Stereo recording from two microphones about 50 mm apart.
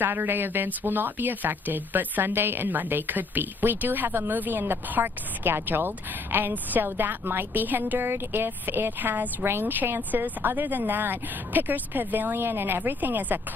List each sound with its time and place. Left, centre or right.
0.0 s speech: right
9.4 s a woman's voice: right
9.7 s speech: right